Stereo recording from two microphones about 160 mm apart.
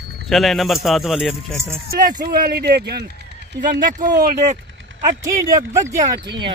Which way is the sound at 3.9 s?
25° right (ahead or behind).